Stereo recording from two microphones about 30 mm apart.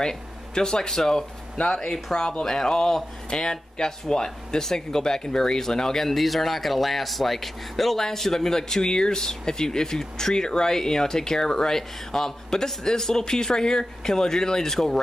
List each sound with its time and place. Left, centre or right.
0.6 s speech: left
6.0 s speech: centre